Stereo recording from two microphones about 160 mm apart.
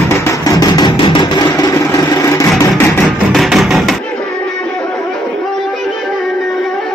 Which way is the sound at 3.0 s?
Centre (ahead or behind).